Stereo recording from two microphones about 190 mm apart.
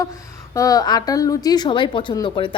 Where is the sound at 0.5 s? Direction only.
20° left (ahead or behind).